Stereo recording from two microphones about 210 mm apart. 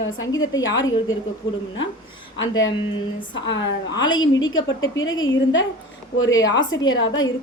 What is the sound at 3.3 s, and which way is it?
Speech, 60° left (ahead or behind).